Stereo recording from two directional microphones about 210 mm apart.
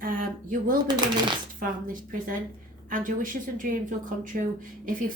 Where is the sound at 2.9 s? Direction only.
40° right (ahead or behind).